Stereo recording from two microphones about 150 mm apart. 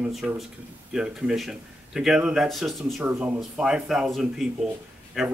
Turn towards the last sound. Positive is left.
turn(degrees=0)  # may be behind; listen again after turning